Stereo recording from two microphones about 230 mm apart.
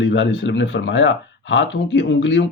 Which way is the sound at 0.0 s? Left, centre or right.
Left.